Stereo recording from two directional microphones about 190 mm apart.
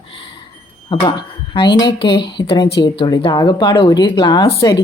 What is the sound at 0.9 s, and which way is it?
Speech, 25° left (ahead or behind).